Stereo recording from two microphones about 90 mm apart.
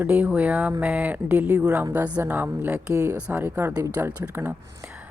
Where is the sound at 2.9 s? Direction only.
35° right (ahead or behind).